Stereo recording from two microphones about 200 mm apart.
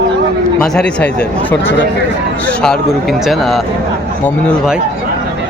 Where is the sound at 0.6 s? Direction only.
5° left (ahead or behind).